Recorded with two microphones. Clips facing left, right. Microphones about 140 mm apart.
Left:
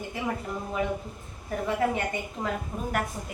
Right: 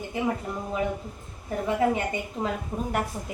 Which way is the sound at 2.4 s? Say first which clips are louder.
Right 2 dB; 20° right (ahead or behind).